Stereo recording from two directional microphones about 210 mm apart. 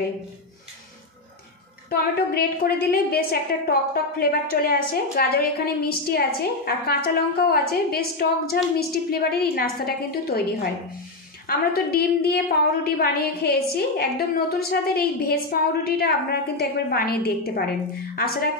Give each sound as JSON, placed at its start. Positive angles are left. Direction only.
{"t": 1.9, "sound": "a woman's voice", "side_deg": 45}